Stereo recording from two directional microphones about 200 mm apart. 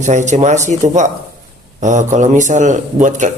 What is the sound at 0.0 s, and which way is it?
Speech, 35° right (ahead or behind).